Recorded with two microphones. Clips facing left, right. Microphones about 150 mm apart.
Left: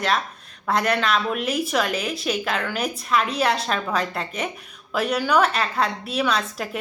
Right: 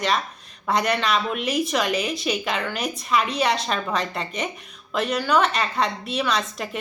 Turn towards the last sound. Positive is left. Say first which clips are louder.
# left 1 dB
turn(degrees=5)  # may be behind; listen again after turning